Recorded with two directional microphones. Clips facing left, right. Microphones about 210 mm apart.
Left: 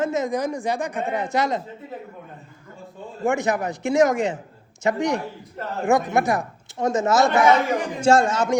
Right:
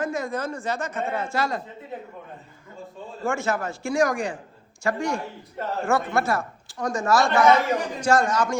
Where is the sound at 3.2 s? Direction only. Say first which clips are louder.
Left 4 dB; 15° left (ahead or behind).